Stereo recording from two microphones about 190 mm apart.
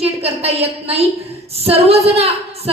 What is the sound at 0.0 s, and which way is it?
A woman's voice, 30° right (ahead or behind).